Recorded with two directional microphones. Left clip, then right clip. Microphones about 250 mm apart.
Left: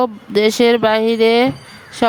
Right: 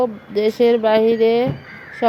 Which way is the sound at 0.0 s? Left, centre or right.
Left.